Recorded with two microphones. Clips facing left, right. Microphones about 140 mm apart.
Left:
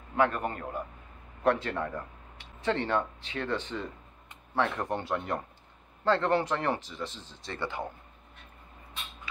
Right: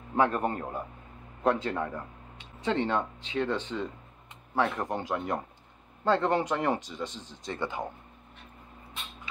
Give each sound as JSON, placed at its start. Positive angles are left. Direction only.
{"t": 0.1, "sound": "a man's voice", "side_deg": -30}
{"t": 1.4, "sound": "speech", "side_deg": -15}